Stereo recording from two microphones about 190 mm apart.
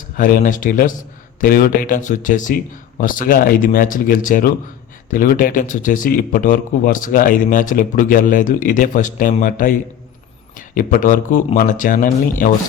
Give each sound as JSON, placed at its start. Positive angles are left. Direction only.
{"t": 0.2, "sound": "speech", "side_deg": 45}
{"t": 10.8, "sound": "speech", "side_deg": 45}